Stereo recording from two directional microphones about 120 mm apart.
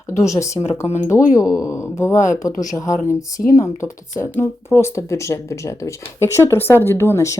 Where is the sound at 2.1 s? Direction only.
90° left.